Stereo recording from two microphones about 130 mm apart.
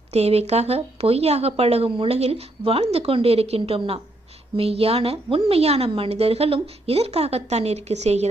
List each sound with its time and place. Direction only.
0.1 s speech: 55° right (ahead or behind)